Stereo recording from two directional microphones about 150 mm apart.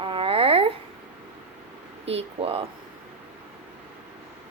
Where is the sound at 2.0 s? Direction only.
40° right (ahead or behind).